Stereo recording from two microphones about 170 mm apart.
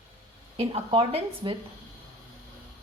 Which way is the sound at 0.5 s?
35° right (ahead or behind).